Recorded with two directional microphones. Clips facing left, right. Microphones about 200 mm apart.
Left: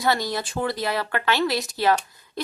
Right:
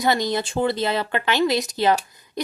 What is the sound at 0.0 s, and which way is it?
A woman's voice, 20° right (ahead or behind).